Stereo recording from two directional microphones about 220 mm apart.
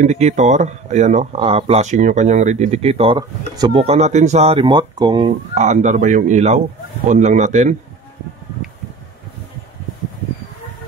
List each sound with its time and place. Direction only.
0.0 s speech: 35° right (ahead or behind)
5.5 s speech: 35° right (ahead or behind)